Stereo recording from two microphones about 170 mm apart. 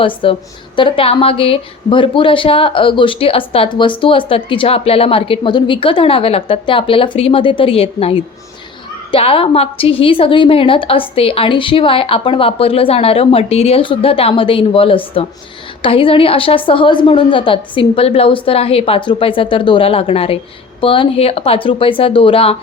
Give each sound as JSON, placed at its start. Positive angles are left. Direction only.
{"t": 0.0, "sound": "a woman's voice", "side_deg": 30}